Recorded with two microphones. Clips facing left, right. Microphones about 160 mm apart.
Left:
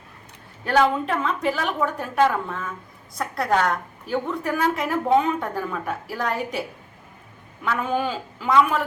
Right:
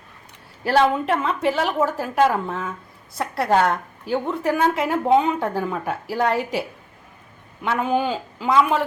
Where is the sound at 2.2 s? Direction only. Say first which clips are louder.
Right 1 dB; 20° right (ahead or behind).